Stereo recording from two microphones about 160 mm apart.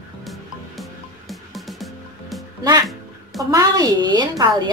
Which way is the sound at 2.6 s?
25° right (ahead or behind).